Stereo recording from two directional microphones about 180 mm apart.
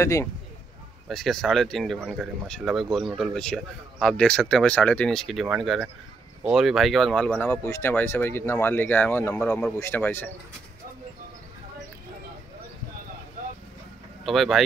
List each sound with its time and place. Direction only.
0.0 s speech: 15° left (ahead or behind)
1.0 s speech: centre (ahead or behind)
14.2 s speech: centre (ahead or behind)